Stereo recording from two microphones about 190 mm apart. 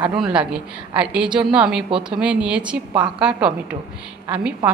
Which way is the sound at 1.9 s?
25° right (ahead or behind).